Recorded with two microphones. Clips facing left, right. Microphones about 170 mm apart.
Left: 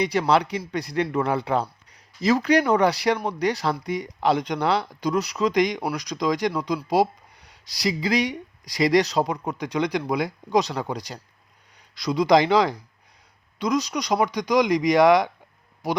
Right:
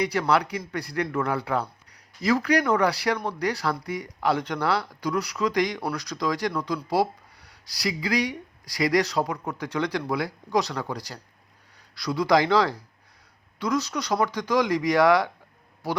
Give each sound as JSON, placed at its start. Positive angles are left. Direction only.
{"t": 0.0, "sound": "speech", "side_deg": 20}